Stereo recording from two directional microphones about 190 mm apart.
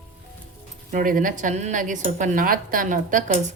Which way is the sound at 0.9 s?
45° right (ahead or behind).